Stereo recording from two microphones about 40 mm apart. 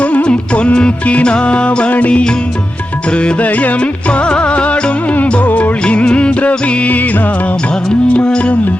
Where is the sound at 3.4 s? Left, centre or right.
Left.